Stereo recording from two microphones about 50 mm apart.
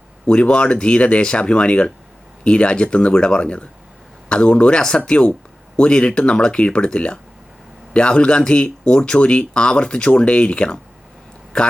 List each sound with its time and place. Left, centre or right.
0.3 s a man's voice: centre